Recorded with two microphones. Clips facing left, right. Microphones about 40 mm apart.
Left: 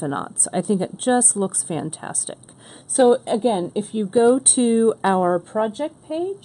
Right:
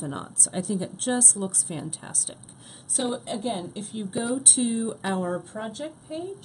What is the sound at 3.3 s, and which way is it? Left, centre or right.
Speech, centre.